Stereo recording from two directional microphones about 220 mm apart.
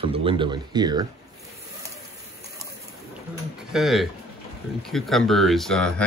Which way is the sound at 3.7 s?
Centre (ahead or behind).